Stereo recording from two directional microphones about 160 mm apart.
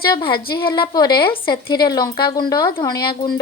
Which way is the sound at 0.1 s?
30° left (ahead or behind).